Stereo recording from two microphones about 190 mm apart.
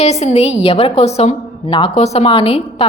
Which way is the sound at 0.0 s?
35° left (ahead or behind).